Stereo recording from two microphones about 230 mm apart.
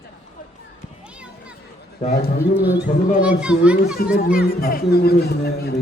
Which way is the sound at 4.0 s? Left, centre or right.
Left.